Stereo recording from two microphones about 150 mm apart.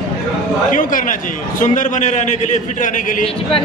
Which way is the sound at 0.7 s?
60° left (ahead or behind).